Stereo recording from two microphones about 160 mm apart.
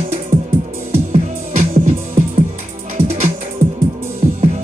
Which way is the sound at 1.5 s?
50° right (ahead or behind).